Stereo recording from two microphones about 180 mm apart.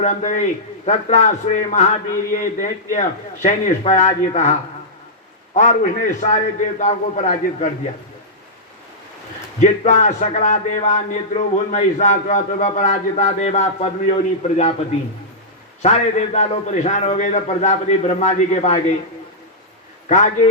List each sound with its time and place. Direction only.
0.0 s a man's voice: 45° left (ahead or behind)
5.5 s a man's voice: 40° left (ahead or behind)
9.6 s speech: 40° left (ahead or behind)
15.8 s speech: 40° left (ahead or behind)
20.1 s a man's voice: 40° left (ahead or behind)